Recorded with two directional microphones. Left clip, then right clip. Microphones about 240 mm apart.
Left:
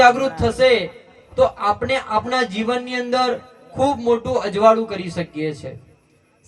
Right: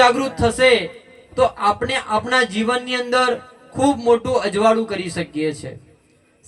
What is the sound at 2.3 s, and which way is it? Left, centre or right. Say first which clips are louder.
Speech: right 2 dB; right.